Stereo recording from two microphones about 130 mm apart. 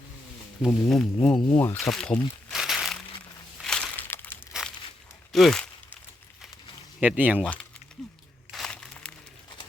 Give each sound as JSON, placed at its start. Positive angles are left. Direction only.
{"t": 0.6, "sound": "speech", "side_deg": 5}
{"t": 1.5, "sound": "speech", "side_deg": 15}
{"t": 1.8, "sound": "speech", "side_deg": 5}
{"t": 2.5, "sound": "crumpling", "side_deg": 0}
{"t": 3.6, "sound": "crushing", "side_deg": 5}
{"t": 4.6, "sound": "a sound", "side_deg": -5}
{"t": 5.3, "sound": "speech", "side_deg": 0}
{"t": 7.2, "sound": "speech", "side_deg": -10}
{"t": 7.4, "sound": "speech", "side_deg": 5}
{"t": 8.5, "sound": "crumpling", "side_deg": 5}